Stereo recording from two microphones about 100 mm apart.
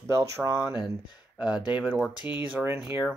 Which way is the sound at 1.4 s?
15° right (ahead or behind).